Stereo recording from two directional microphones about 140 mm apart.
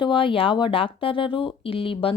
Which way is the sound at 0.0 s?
35° left (ahead or behind).